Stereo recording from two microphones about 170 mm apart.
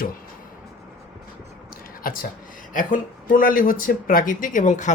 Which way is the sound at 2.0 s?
60° left (ahead or behind).